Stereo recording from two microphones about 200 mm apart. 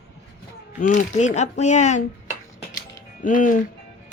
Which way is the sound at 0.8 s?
35° left (ahead or behind).